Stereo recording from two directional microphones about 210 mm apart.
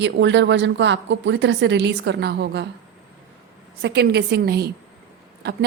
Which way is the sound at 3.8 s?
50° right (ahead or behind).